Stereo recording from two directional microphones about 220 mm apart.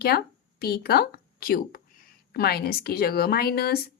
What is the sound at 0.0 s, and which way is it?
A woman's voice, 45° left (ahead or behind).